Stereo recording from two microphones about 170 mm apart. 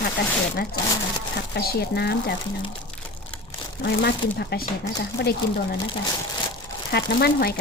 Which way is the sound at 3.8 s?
75° left (ahead or behind).